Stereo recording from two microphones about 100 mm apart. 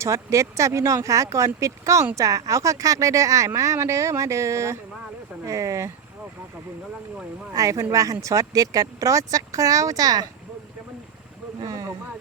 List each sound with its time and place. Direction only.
0.0 s speech: 30° right (ahead or behind)
7.5 s speech: 35° right (ahead or behind)
11.6 s boat: 35° right (ahead or behind)